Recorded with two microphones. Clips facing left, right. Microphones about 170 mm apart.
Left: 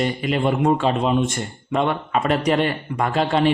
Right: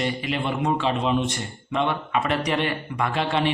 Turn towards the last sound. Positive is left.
turn(degrees=40)  # may be behind; listen again after turning